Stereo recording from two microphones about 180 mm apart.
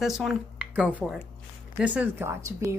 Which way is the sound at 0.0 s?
Centre (ahead or behind).